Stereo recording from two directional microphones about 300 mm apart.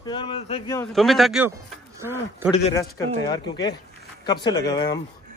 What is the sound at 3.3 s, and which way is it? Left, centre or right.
Speech, centre.